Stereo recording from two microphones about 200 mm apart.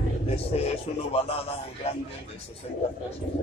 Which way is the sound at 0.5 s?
30° left (ahead or behind).